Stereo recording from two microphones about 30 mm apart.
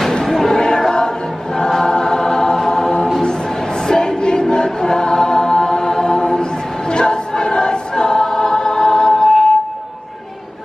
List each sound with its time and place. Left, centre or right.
0.2 s choir: centre
3.8 s a sound: left
4.2 s choir: left